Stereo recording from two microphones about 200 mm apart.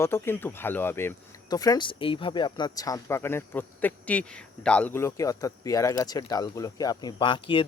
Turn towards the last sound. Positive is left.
turn(degrees=25)  # may be behind; listen again after turning